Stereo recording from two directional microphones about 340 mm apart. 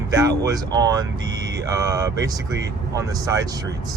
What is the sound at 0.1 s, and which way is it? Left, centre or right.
Speech, centre.